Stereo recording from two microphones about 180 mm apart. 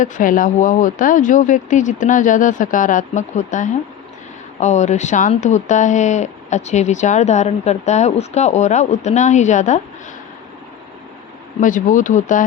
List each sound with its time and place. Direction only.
0.0 s speech: 45° left (ahead or behind)
11.6 s speech: 45° left (ahead or behind)